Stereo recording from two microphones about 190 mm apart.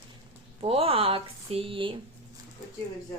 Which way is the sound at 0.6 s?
30° right (ahead or behind).